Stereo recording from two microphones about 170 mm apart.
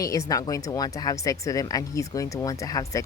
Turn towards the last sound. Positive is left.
turn(degrees=20)  # may be behind; listen again after turning